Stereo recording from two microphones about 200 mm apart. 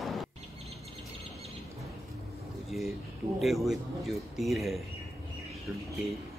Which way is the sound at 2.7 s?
Centre (ahead or behind).